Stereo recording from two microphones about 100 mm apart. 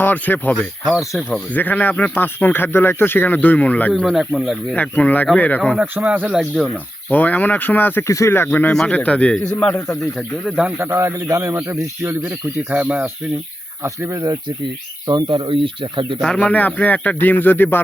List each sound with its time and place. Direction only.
0.0 s speech: 20° left (ahead or behind)
0.9 s speech: centre (ahead or behind)
1.5 s speech: 15° left (ahead or behind)
4.0 s speech: 5° right (ahead or behind)
4.7 s speech: 15° left (ahead or behind)
5.7 s speech: 10° right (ahead or behind)
7.1 s speech: 15° left (ahead or behind)
8.7 s speech: 5° left (ahead or behind)
10.4 s speech: 10° right (ahead or behind)
11.0 s speech: 30° right (ahead or behind); by 13.1 s 15° right (ahead or behind)
13.8 s speech: 30° right (ahead or behind)
15.0 s speech: 50° right (ahead or behind)
16.2 s speech: 10° left (ahead or behind)